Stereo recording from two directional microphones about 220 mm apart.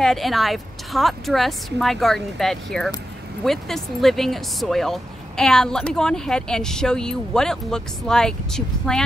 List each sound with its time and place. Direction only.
0.0 s speech: centre (ahead or behind)